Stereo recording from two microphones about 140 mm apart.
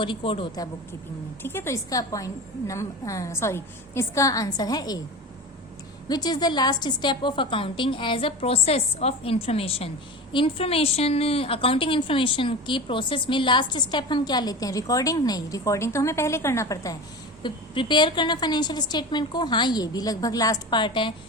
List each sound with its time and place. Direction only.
0.0 s a woman's voice: 40° left (ahead or behind)
1.4 s a woman's voice: 15° left (ahead or behind)
6.1 s a woman's voice: 30° left (ahead or behind)